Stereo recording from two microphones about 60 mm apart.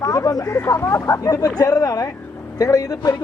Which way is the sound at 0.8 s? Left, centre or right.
Left.